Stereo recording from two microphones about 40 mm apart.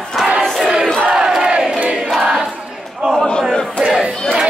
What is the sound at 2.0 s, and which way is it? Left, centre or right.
Choir, centre.